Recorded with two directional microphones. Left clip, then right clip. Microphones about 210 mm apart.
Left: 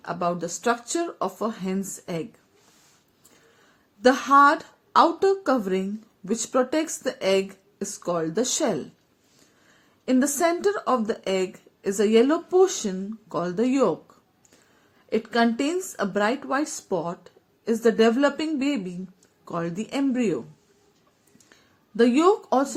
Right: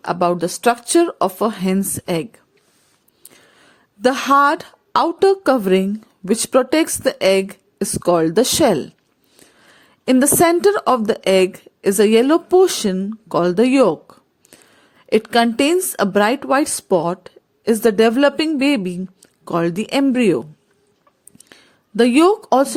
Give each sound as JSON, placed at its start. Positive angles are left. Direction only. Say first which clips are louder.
{"t": 0.0, "sound": "a woman's voice", "louder": "right 9 dB", "side_deg": -50}
{"t": 4.0, "sound": "a woman's voice", "louder": "right 3 dB", "side_deg": -50}
{"t": 21.3, "sound": "a sound", "louder": "right 9 dB", "side_deg": -50}